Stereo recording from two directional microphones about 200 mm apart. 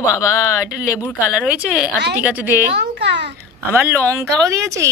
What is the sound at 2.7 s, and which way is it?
Speech, 60° right (ahead or behind).